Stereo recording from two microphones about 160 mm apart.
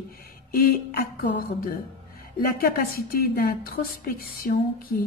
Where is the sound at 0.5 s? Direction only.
75° left (ahead or behind).